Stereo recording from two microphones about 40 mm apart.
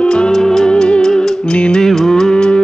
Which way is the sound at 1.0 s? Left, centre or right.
Centre.